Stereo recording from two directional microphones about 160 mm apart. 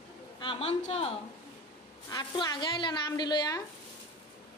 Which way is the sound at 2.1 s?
25° left (ahead or behind).